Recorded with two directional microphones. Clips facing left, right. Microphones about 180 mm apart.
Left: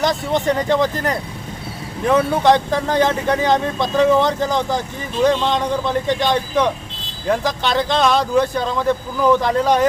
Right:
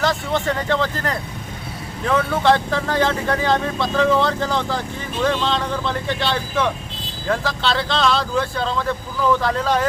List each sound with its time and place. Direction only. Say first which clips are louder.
0.0 s speech: left 2 dB; 15° left (ahead or behind)